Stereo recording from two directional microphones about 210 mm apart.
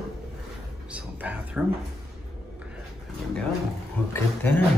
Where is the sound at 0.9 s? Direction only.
5° right (ahead or behind).